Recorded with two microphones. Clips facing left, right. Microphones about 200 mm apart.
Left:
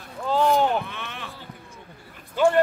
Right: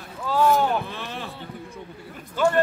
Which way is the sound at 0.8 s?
35° right (ahead or behind).